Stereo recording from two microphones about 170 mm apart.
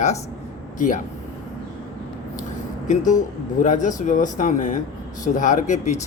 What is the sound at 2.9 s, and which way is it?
Speech, 45° left (ahead or behind).